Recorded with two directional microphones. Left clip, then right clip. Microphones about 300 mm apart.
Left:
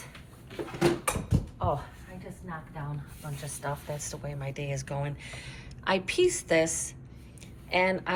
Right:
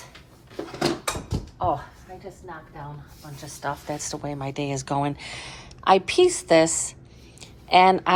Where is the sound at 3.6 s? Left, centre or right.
Right.